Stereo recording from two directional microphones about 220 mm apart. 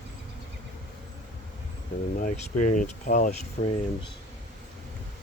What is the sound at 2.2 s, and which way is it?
Speech, 35° left (ahead or behind).